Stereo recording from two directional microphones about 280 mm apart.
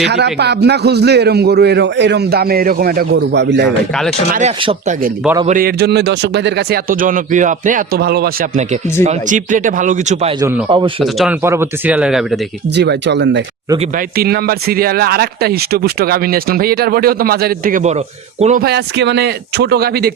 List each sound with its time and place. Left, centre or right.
0.1 s speech: right
4.4 s speech: right
10.4 s a man's voice: centre
11.0 s speech: centre
12.7 s speech: right